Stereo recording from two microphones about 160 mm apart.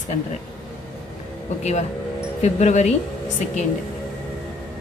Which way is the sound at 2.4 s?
45° left (ahead or behind).